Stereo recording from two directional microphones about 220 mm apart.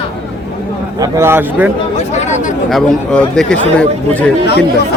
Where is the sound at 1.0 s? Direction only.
10° right (ahead or behind).